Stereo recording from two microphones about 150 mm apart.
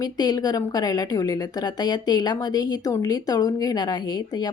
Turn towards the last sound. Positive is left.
turn(degrees=25)  # may be behind; listen again after turning